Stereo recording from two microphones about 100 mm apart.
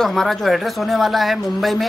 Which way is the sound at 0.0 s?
5° left (ahead or behind).